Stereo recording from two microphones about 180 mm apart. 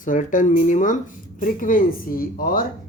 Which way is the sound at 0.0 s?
45° left (ahead or behind).